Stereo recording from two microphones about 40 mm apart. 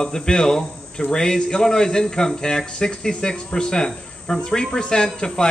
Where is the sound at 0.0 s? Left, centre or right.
Centre.